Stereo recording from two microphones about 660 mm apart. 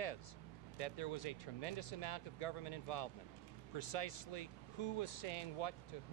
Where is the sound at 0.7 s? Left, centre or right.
Left.